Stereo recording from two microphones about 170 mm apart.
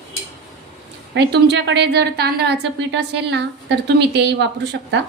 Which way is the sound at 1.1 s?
90° right.